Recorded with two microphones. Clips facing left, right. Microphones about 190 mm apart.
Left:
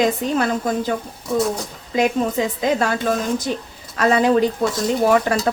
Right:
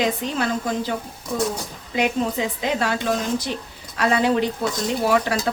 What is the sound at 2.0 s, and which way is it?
A woman's voice, 40° left (ahead or behind).